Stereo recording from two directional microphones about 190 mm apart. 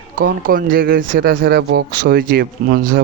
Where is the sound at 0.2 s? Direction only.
45° right (ahead or behind).